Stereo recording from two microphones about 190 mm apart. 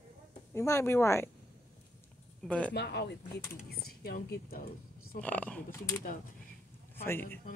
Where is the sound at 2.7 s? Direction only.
60° left (ahead or behind).